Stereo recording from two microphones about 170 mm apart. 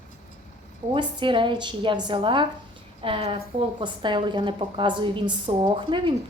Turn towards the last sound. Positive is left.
turn(degrees=-30)  # may be behind; listen again after turning